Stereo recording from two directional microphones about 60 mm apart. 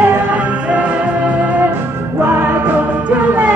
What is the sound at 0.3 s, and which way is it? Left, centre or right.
Music, right.